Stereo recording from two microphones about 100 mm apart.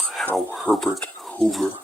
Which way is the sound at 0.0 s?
Centre (ahead or behind).